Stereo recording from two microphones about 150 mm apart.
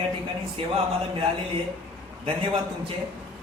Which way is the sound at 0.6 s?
40° right (ahead or behind).